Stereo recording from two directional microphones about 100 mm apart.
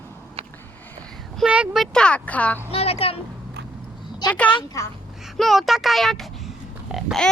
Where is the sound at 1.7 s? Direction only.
5° left (ahead or behind).